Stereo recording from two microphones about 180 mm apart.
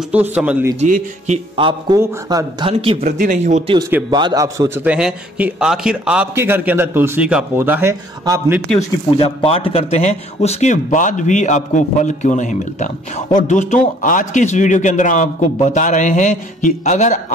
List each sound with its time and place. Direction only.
0.1 s a man's voice: 10° right (ahead or behind)
0.7 s speech: 45° right (ahead or behind)
1.6 s speech: 30° right (ahead or behind)
3.0 s speech: 45° right (ahead or behind)
4.1 s a man's voice: 25° right (ahead or behind)
9.2 s a man's voice: 30° left (ahead or behind)